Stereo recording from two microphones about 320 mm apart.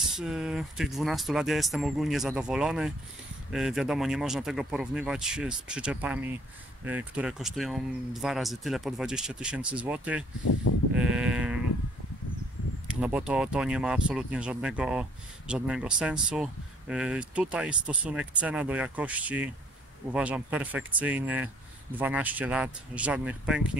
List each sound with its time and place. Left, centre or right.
0.1 s speech: centre
10.7 s sheep: left
11.0 s speech: centre
12.8 s speech: centre